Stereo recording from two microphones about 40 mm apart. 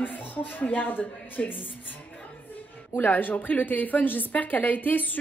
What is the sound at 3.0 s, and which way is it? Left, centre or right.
A woman's voice, left.